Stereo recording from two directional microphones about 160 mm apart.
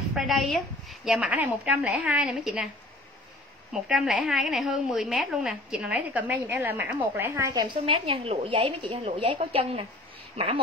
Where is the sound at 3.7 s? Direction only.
5° right (ahead or behind).